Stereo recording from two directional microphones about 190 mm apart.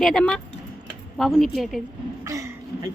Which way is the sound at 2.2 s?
15° right (ahead or behind).